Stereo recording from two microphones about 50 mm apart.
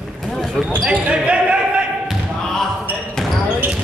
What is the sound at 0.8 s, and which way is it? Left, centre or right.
Basketball bounce, right.